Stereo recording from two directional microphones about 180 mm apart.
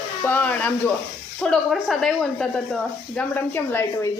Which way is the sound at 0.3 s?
10° left (ahead or behind).